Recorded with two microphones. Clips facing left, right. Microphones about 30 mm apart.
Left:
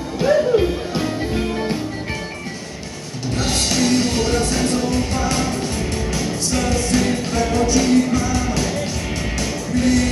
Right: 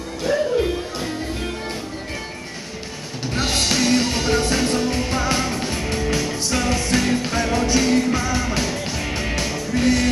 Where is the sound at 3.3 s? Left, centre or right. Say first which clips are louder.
Even; centre.